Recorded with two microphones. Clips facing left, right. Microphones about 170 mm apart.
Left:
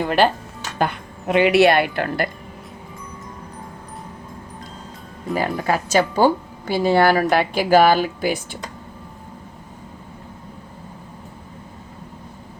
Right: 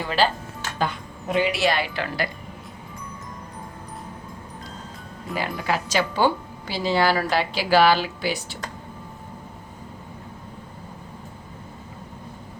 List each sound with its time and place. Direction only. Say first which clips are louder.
0.0 s a woman's voice: left 5 dB; 55° left (ahead or behind)
5.3 s speech: left 5 dB; 45° left (ahead or behind)